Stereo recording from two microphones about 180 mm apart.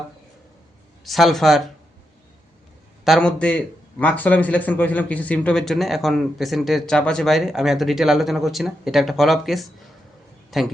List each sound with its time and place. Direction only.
1.0 s speech: centre (ahead or behind)
3.0 s speech: centre (ahead or behind)